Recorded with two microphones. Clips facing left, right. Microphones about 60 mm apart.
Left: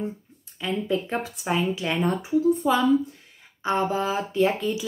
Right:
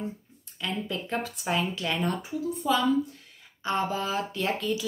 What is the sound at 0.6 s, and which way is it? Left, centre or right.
Speech, centre.